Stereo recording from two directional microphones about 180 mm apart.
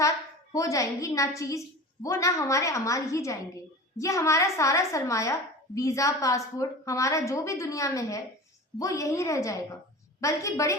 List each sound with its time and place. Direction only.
0.5 s a woman's voice: 20° left (ahead or behind)